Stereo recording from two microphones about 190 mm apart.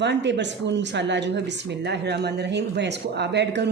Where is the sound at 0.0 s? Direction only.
65° right (ahead or behind).